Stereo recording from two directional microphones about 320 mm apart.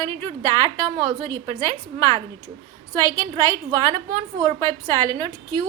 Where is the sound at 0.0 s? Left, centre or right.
Centre.